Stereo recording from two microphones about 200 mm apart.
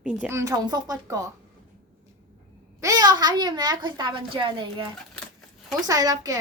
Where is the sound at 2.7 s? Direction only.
20° right (ahead or behind).